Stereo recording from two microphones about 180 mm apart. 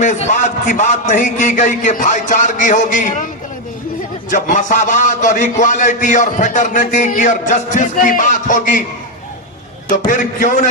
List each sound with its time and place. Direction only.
0.0 s a man's voice: 40° left (ahead or behind)
4.3 s a man's voice: 45° left (ahead or behind)
9.9 s a man's voice: 45° left (ahead or behind)